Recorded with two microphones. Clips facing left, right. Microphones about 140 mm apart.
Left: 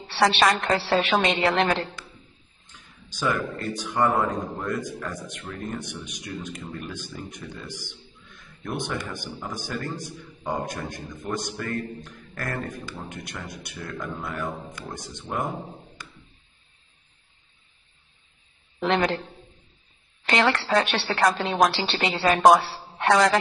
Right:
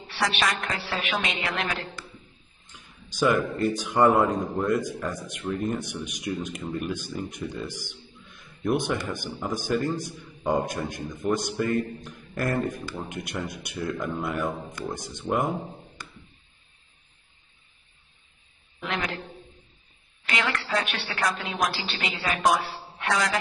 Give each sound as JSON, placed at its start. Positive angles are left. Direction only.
{"t": 0.0, "sound": "a woman's voice", "side_deg": 30}
{"t": 3.1, "sound": "a man's voice", "side_deg": -10}
{"t": 18.8, "sound": "a woman's voice", "side_deg": 30}
{"t": 20.2, "sound": "a woman's voice", "side_deg": 35}